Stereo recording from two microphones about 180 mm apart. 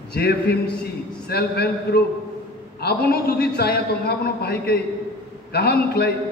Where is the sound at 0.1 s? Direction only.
60° left (ahead or behind).